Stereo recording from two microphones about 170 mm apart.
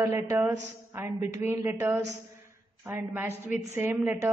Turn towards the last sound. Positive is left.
turn(degrees=-10)  # may be behind; listen again after turning